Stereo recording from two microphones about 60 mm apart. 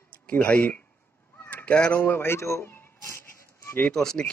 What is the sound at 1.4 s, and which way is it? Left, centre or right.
Cat, left.